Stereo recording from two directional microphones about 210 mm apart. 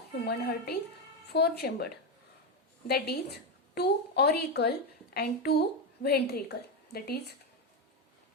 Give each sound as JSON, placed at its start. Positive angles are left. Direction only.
{"t": 0.3, "sound": "a woman's voice", "side_deg": 50}